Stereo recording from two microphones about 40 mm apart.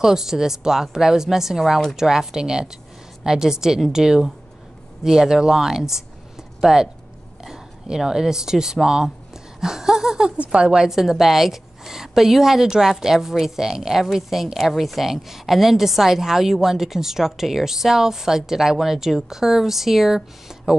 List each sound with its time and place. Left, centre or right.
0.0 s a woman's voice: centre
10.3 s a woman's voice: right
10.9 s a woman's voice: centre